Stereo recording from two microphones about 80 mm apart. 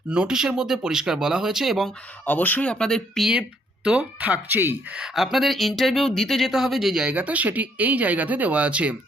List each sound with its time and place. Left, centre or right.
0.1 s speech: centre
2.2 s speech: left
3.8 s speech: centre
4.9 s speech: centre
7.1 s speech: centre